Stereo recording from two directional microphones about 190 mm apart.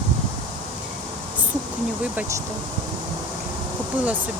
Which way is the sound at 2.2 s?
15° right (ahead or behind).